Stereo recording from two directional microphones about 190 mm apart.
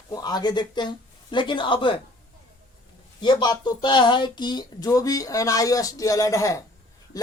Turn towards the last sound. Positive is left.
turn(degrees=20)  # may be behind; listen again after turning